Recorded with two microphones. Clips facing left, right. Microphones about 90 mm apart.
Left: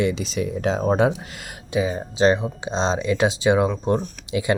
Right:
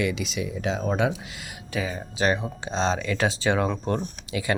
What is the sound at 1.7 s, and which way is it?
Speech, 20° left (ahead or behind).